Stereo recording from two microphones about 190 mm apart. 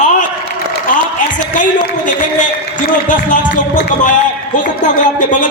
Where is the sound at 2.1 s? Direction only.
40° left (ahead or behind).